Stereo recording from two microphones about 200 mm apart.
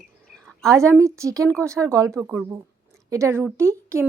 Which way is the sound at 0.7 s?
15° right (ahead or behind).